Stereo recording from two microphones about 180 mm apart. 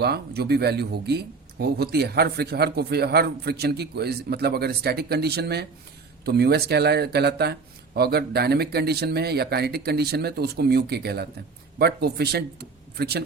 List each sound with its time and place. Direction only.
0.0 s speech: 60° right (ahead or behind)